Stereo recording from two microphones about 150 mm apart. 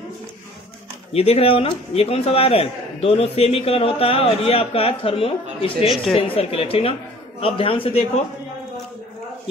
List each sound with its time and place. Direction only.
1.1 s a man's voice: 40° left (ahead or behind)